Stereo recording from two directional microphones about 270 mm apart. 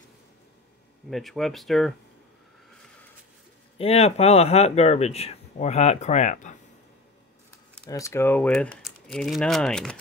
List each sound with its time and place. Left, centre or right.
1.1 s speech: centre
3.7 s speech: left
7.9 s speech: centre